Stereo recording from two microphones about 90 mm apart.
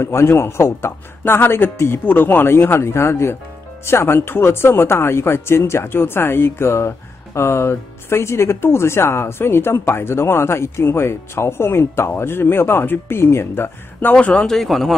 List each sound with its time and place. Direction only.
0.0 s speech: 30° left (ahead or behind)
14.1 s speech: 10° left (ahead or behind)